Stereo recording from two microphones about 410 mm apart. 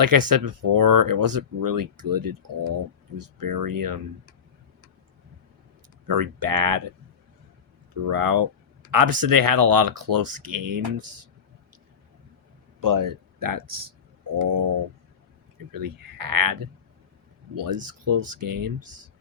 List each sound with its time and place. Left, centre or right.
0.0 s speech: right
6.1 s speech: right
8.0 s speech: right
12.8 s speech: right
14.3 s a sound: right
15.7 s speech: right